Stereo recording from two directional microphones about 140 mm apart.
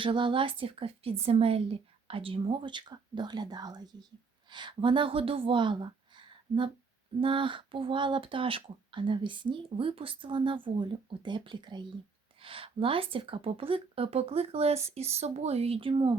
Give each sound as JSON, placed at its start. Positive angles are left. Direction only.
{"t": 0.0, "sound": "speech", "side_deg": -35}